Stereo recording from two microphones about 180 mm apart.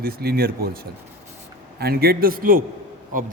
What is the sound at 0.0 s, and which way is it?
A man's voice, 60° right (ahead or behind).